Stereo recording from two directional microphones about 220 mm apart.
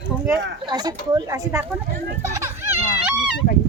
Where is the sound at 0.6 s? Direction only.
20° right (ahead or behind).